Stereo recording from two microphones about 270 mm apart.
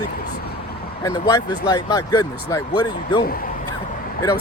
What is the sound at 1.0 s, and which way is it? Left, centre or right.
Speech, centre.